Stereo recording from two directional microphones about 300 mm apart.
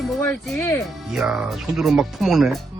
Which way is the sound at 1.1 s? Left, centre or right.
Centre.